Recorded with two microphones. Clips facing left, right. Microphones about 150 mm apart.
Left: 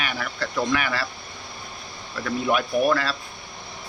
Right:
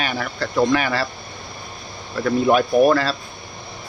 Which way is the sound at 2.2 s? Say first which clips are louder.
Right 7 dB; 35° right (ahead or behind).